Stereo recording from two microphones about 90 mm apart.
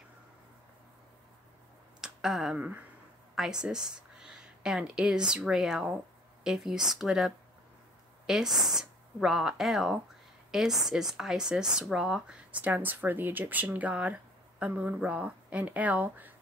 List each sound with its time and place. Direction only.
2.0 s a sound: 5° right (ahead or behind)
2.5 s speech: 15° right (ahead or behind)
3.3 s speech: 5° right (ahead or behind)